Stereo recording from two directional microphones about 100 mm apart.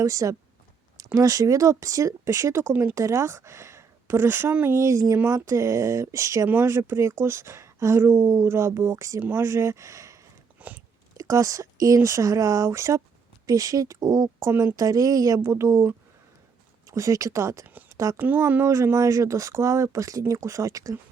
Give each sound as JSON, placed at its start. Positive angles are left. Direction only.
{"t": 0.0, "sound": "speech", "side_deg": -35}
{"t": 10.6, "sound": "chewing", "side_deg": -15}
{"t": 11.2, "sound": "speech", "side_deg": -35}
{"t": 14.3, "sound": "speech", "side_deg": -25}
{"t": 14.8, "sound": "speech", "side_deg": -35}
{"t": 16.9, "sound": "speech", "side_deg": -35}
{"t": 18.2, "sound": "speech", "side_deg": -20}